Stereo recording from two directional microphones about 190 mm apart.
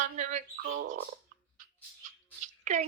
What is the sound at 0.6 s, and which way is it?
Speech, 85° right.